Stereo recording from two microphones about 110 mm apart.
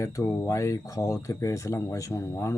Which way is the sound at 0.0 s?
30° left (ahead or behind).